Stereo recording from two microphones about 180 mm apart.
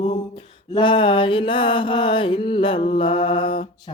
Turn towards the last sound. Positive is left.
turn(degrees=30)  # may be behind; listen again after turning